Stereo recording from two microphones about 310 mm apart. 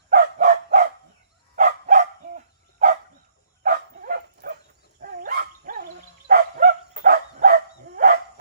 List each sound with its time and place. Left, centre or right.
0.1 s dog: right